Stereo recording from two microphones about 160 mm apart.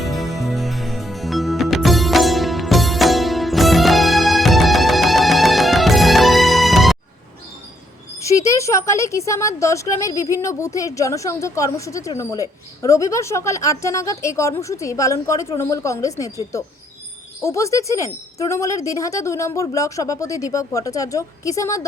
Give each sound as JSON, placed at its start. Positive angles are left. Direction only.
{"t": 0.0, "sound": "music", "side_deg": 0}
{"t": 8.2, "sound": "speech", "side_deg": 20}